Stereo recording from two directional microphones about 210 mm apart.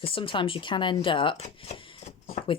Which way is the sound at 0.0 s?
25° left (ahead or behind).